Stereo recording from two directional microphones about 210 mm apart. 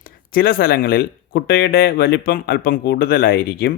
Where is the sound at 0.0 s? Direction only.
45° left (ahead or behind).